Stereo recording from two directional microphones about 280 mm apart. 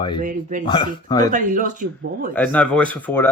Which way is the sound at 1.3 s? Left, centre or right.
Right.